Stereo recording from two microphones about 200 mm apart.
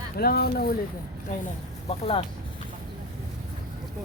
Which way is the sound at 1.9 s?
30° left (ahead or behind).